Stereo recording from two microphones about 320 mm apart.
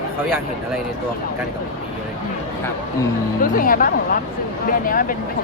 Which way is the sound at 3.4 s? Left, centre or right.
Left.